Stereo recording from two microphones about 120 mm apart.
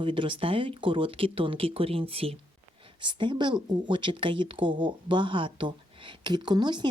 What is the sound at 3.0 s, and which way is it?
Speech, 40° right (ahead or behind).